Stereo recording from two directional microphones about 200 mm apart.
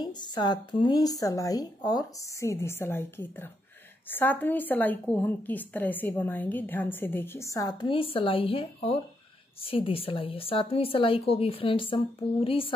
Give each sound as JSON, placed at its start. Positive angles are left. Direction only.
{"t": 0.0, "sound": "a woman's voice", "side_deg": 20}